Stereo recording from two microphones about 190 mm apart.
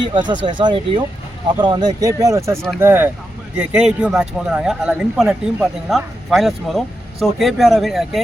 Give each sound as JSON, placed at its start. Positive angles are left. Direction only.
{"t": 0.0, "sound": "speech", "side_deg": -25}